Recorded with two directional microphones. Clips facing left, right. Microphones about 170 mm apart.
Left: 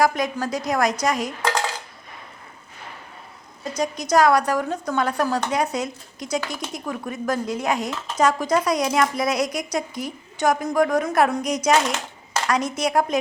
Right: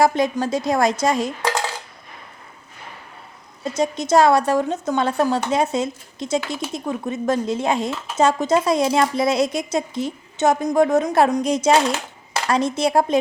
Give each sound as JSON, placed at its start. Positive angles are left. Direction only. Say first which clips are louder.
{"t": 0.0, "sound": "speech", "louder": "right 3 dB", "side_deg": -25}
{"t": 3.6, "sound": "speech", "louder": "right 4 dB", "side_deg": -25}